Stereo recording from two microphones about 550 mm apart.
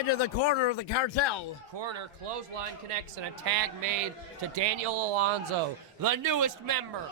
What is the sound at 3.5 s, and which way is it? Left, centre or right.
Speech, right.